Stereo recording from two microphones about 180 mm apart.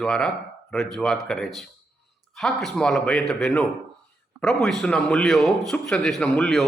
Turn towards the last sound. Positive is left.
turn(degrees=5)  # may be behind; listen again after turning